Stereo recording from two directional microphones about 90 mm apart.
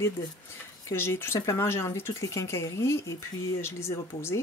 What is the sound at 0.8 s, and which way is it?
Speech, 25° left (ahead or behind).